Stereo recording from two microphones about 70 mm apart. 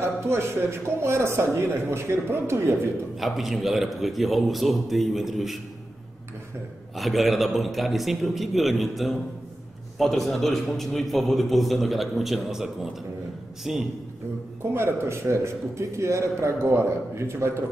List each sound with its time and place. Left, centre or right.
0.0 s a man's voice: right
3.2 s a man's voice: centre
7.0 s a man's voice: centre
13.7 s a man's voice: centre
14.7 s a man's voice: right